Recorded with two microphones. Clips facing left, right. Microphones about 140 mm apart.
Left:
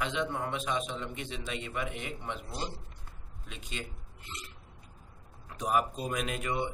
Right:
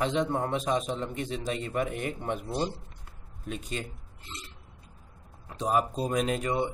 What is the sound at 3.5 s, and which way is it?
Speech, 40° right (ahead or behind).